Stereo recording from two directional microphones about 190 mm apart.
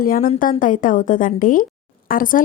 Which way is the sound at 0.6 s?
45° left (ahead or behind).